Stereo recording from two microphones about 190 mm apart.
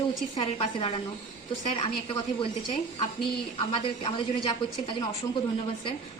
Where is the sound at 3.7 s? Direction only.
30° left (ahead or behind).